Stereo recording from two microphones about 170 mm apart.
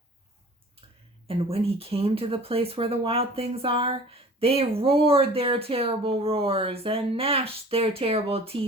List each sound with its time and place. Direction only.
1.3 s speech: 35° right (ahead or behind)